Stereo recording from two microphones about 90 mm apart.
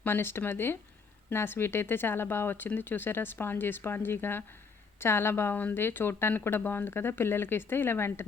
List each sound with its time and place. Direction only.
0.0 s speech: 25° left (ahead or behind)